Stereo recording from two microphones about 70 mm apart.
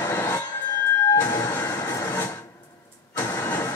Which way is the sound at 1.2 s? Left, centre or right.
Left.